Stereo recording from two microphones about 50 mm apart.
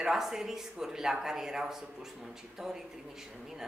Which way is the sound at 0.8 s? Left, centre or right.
Centre.